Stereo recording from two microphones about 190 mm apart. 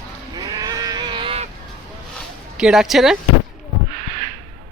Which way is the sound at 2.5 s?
5° right (ahead or behind).